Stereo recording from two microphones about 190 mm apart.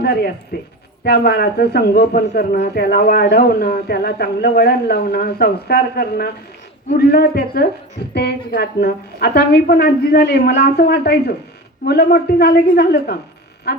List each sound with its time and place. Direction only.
0.0 s speech: 55° left (ahead or behind)